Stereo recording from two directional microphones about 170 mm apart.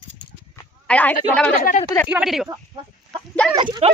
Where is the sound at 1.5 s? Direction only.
55° left (ahead or behind).